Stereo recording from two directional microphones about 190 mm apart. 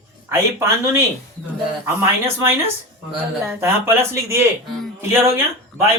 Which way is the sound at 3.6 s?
15° right (ahead or behind).